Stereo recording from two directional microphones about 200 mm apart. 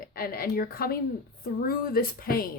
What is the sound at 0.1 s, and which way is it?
A woman's voice, 45° left (ahead or behind).